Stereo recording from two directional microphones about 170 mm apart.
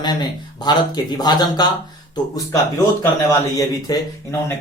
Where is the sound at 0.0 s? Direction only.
25° left (ahead or behind).